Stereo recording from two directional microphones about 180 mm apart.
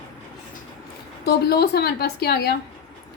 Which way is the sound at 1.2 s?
65° left (ahead or behind).